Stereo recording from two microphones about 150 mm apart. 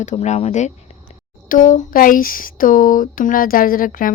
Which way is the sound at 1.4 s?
65° left (ahead or behind).